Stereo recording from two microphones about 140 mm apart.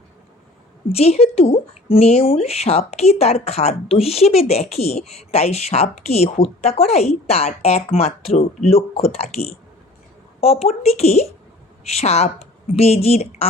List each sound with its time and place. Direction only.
0.9 s speech: 50° left (ahead or behind)